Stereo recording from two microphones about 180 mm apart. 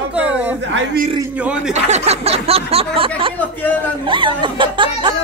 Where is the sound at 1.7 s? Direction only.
40° right (ahead or behind).